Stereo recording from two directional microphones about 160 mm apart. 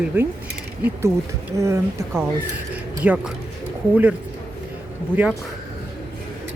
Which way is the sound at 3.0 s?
10° right (ahead or behind).